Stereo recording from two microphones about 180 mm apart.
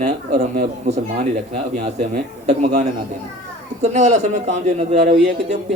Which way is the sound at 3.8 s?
40° right (ahead or behind).